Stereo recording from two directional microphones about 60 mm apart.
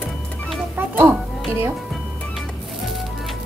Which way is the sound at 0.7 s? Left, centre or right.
Right.